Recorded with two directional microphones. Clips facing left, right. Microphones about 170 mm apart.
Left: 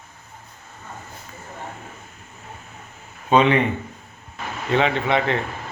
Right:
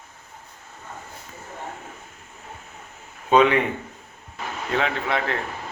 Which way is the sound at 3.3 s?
5° right (ahead or behind).